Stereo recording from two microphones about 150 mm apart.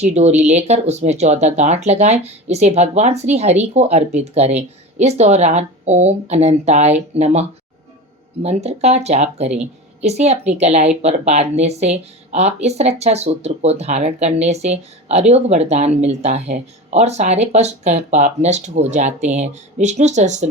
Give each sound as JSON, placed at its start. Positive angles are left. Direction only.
{"t": 0.0, "sound": "speech", "side_deg": -50}